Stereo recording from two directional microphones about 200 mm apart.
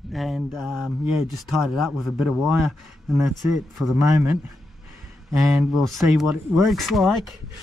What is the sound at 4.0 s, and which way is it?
Speech, 15° right (ahead or behind).